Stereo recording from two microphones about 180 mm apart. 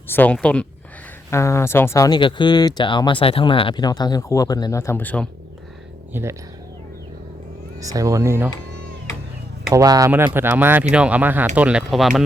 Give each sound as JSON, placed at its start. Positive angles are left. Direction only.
{"t": 0.1, "sound": "speech", "side_deg": 10}
{"t": 6.1, "sound": "speech", "side_deg": -15}
{"t": 7.8, "sound": "speech", "side_deg": -20}
{"t": 9.7, "sound": "speech", "side_deg": -20}